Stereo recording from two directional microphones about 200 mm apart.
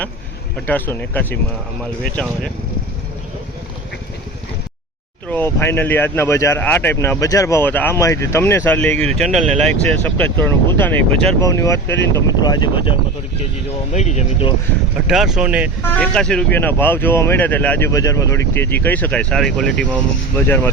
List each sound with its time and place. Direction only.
0.7 s speech: 10° left (ahead or behind)
5.3 s speech: 10° left (ahead or behind)
13.9 s speech: 35° left (ahead or behind)
15.0 s speech: centre (ahead or behind)
15.8 s speech: 5° left (ahead or behind)